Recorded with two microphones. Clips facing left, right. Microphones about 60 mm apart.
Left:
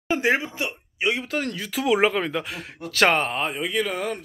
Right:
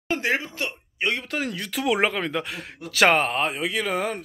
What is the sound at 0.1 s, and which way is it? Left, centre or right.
Speech, centre.